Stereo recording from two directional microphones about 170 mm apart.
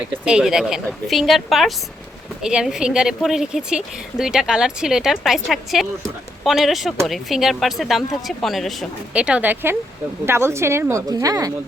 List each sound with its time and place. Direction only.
0.0 s speech: 5° right (ahead or behind); by 11.5 s 20° right (ahead or behind)